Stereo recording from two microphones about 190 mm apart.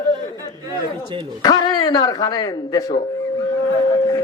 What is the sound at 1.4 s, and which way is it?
A man's voice, 20° left (ahead or behind).